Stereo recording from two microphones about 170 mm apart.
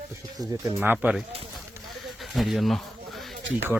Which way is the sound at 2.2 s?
Centre (ahead or behind).